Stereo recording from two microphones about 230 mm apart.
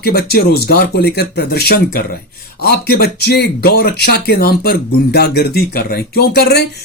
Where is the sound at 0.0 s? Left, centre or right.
Left.